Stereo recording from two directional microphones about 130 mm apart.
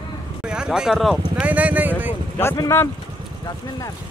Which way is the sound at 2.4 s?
20° left (ahead or behind).